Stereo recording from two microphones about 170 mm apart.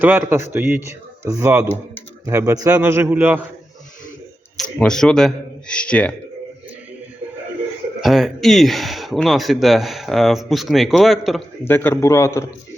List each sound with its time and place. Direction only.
0.0 s speech: 10° right (ahead or behind)
4.5 s speech: 5° left (ahead or behind)
8.0 s speech: centre (ahead or behind)
11.6 s a man's voice: 10° left (ahead or behind)